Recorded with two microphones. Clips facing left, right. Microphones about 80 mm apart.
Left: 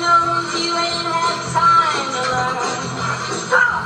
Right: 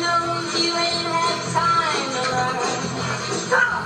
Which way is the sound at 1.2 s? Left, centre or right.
Centre.